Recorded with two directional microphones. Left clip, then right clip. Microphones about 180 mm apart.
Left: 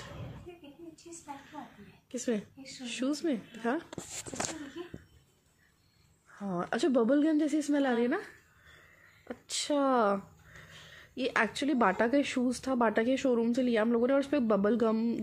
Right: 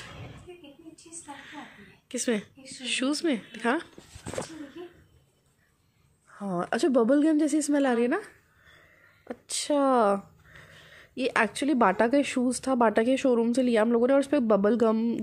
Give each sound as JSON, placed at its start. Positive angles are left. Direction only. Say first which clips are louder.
{"t": 1.3, "sound": "a sound", "louder": "right 3 dB", "side_deg": -15}
{"t": 2.8, "sound": "speech", "louder": "right 6 dB", "side_deg": -10}
{"t": 4.8, "sound": "cough", "louder": "right 1 dB", "side_deg": -15}
{"t": 6.3, "sound": "a woman's voice", "louder": "right 5 dB", "side_deg": -15}